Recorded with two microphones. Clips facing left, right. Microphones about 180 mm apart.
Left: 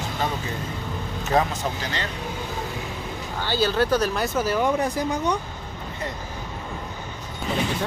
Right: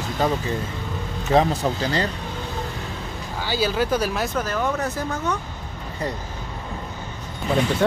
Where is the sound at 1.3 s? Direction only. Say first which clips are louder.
Right 4 dB; 35° right (ahead or behind).